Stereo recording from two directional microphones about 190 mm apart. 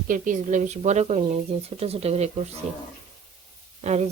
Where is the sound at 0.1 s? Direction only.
40° right (ahead or behind).